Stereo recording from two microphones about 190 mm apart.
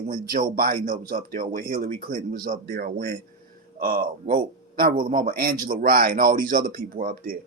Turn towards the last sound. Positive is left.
turn(degrees=-50)  # may be behind; listen again after turning